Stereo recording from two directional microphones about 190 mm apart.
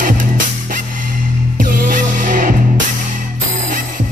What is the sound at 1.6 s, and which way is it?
Music, 45° right (ahead or behind).